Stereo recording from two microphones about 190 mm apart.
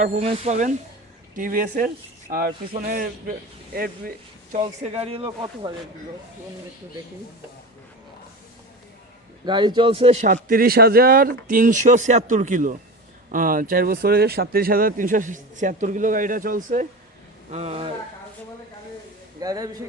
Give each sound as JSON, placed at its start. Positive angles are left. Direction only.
{"t": 0.0, "sound": "speech", "side_deg": -35}
{"t": 4.8, "sound": "speech", "side_deg": -30}
{"t": 9.5, "sound": "speech", "side_deg": -25}
{"t": 17.5, "sound": "speech", "side_deg": -35}
{"t": 19.4, "sound": "speech", "side_deg": -20}